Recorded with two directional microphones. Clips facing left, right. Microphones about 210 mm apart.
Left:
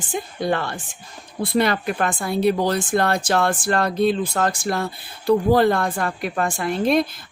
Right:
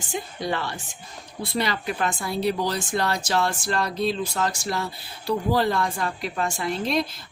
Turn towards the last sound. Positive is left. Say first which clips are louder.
# left 6 dB
turn(degrees=55)  # may be behind; listen again after turning